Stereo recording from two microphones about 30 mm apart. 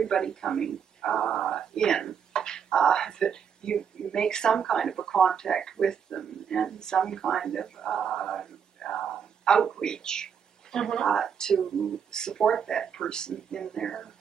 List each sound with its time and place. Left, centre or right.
0.0 s speech: left